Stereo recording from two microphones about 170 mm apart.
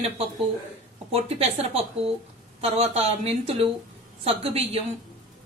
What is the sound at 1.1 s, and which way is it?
A woman's voice, 35° right (ahead or behind).